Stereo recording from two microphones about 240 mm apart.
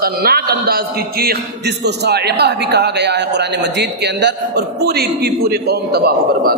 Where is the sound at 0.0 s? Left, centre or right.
Right.